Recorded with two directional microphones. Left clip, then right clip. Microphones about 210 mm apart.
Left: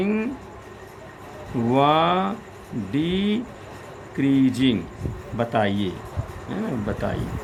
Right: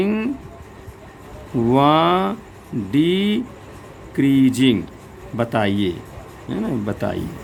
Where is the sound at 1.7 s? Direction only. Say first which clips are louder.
Right 3 dB; 35° right (ahead or behind).